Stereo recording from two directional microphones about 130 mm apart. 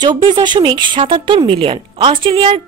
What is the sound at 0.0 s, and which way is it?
A woman's voice, 35° right (ahead or behind).